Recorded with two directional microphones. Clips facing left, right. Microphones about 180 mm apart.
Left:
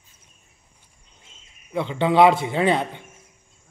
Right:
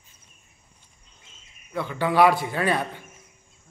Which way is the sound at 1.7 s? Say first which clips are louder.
Left 4 dB; 20° left (ahead or behind).